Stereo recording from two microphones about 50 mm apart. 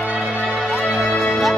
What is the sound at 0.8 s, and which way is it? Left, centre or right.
Music, left.